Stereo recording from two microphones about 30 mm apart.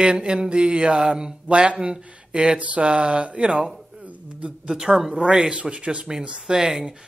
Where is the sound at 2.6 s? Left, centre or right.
Right.